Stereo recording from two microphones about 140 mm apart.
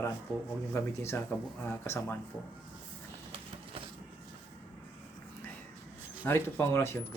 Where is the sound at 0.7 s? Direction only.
15° left (ahead or behind).